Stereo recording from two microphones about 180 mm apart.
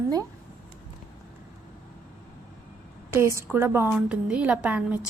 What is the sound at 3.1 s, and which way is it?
A woman's voice, 15° right (ahead or behind).